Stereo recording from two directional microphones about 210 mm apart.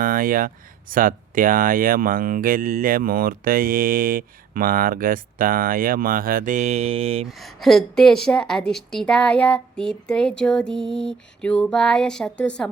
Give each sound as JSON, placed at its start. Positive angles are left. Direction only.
{"t": 0.0, "sound": "speech", "side_deg": -40}
{"t": 7.3, "sound": "a woman's voice", "side_deg": 0}